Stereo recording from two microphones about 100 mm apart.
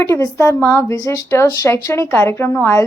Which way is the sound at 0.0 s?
30° left (ahead or behind).